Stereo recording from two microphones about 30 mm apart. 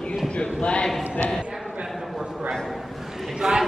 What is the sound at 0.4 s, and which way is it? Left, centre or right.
Speech, left.